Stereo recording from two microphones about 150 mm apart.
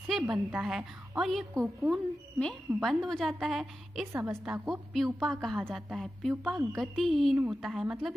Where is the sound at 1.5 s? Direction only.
20° right (ahead or behind).